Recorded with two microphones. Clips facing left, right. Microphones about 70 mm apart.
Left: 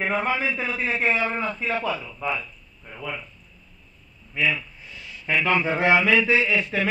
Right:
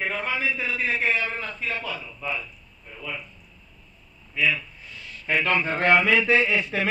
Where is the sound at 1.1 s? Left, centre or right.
Left.